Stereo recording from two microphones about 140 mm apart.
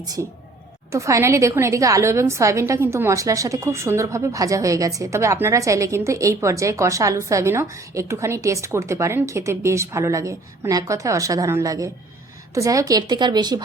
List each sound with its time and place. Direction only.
0.0 s a woman's voice: 25° right (ahead or behind)